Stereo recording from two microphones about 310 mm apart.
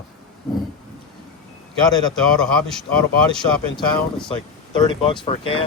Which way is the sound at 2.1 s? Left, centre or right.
Centre.